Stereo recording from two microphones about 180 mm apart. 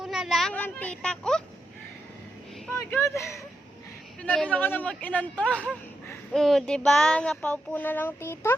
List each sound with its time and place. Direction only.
0.0 s speech: centre (ahead or behind)
2.6 s speech: 15° left (ahead or behind)
4.2 s child singing: 5° left (ahead or behind)